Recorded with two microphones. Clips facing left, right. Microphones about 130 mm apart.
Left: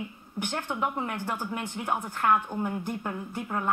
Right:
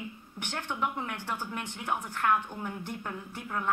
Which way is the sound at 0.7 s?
40° left (ahead or behind).